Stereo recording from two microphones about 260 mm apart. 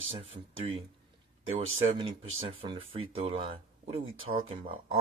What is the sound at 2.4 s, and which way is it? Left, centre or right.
Speech, centre.